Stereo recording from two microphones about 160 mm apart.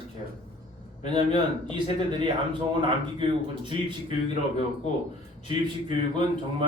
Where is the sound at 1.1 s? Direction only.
30° right (ahead or behind).